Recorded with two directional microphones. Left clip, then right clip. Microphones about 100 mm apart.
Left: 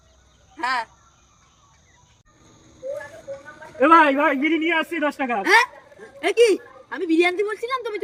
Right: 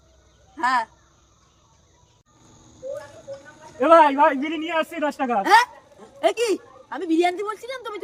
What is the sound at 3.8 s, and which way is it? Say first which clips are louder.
A woman's voice: even; 30° right (ahead or behind).